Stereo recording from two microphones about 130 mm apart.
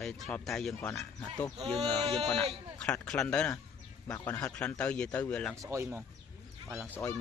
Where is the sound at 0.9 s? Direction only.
20° left (ahead or behind).